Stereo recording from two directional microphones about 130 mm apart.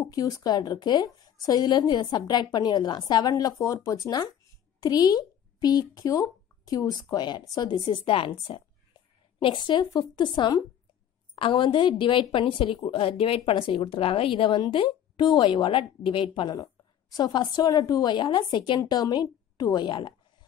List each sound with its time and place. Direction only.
0.0 s a woman's voice: 25° left (ahead or behind)
16.5 s a woman's voice: 30° left (ahead or behind)